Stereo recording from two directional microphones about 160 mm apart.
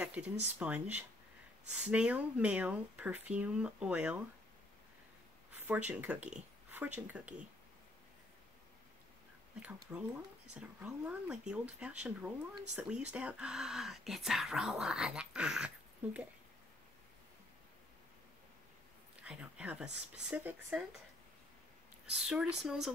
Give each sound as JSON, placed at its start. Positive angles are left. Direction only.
{"t": 0.0, "sound": "speech", "side_deg": -10}
{"t": 5.5, "sound": "speech", "side_deg": -10}
{"t": 9.6, "sound": "speech", "side_deg": -10}
{"t": 19.2, "sound": "speech", "side_deg": -5}
{"t": 22.0, "sound": "speech", "side_deg": -5}